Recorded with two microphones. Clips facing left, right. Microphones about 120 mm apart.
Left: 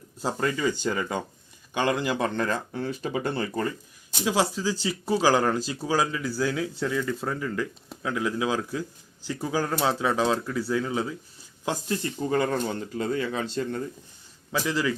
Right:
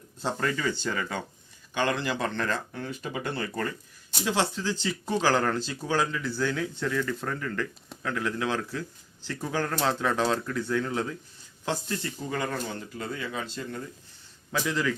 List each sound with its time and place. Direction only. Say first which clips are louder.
0.2 s speech: left 2 dB; 10° left (ahead or behind)
2.8 s speech: left 5 dB; 30° left (ahead or behind)
4.2 s speech: left 3 dB; 10° left (ahead or behind)
11.9 s speech: left 6 dB; 30° left (ahead or behind)
14.5 s a man's voice: left 2 dB; 5° left (ahead or behind)